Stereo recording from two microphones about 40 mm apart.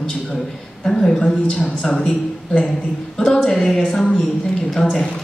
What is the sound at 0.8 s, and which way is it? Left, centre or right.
Speech, centre.